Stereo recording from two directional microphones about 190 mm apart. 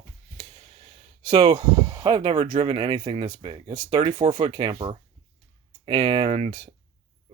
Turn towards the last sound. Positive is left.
turn(degrees=-25)  # may be behind; listen again after turning